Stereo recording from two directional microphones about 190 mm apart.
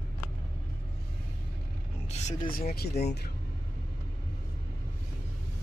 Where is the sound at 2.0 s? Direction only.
35° left (ahead or behind).